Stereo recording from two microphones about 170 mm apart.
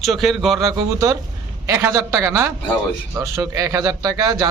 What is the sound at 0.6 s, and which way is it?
Speech, 20° right (ahead or behind).